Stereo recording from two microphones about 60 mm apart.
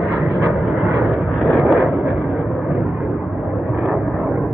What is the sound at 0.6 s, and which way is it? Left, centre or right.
Vehicle, centre.